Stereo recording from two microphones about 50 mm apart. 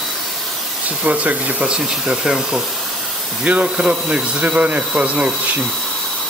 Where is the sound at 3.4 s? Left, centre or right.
Right.